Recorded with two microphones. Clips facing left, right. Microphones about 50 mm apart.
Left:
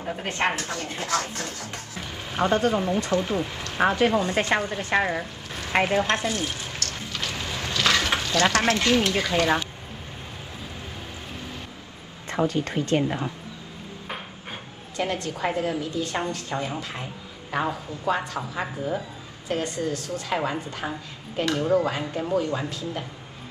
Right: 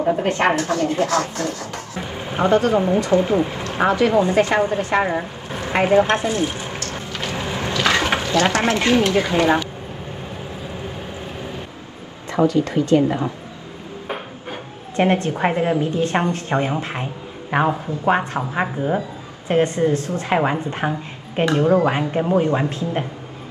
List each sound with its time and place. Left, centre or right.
0.0 s a woman's voice: right
3.8 s speech: right
4.2 s a woman's voice: right
12.4 s speech: left
15.0 s a woman's voice: right